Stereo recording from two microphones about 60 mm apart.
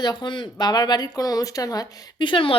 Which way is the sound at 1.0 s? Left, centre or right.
Left.